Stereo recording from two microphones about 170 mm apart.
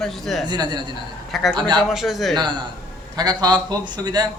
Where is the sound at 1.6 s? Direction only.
25° right (ahead or behind).